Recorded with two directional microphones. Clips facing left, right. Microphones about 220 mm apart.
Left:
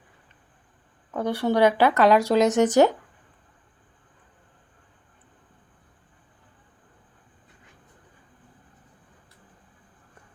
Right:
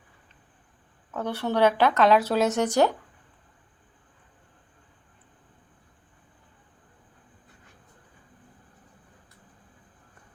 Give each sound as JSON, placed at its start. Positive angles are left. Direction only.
{"t": 1.1, "sound": "speech", "side_deg": 10}